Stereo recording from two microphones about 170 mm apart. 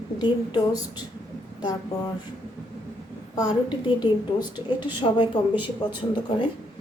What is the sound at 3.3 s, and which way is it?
A woman's voice, 25° left (ahead or behind).